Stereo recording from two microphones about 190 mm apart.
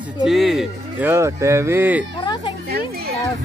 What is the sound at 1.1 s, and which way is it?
Speech, 15° right (ahead or behind).